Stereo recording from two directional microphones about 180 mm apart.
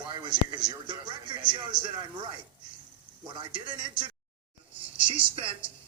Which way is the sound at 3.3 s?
25° right (ahead or behind).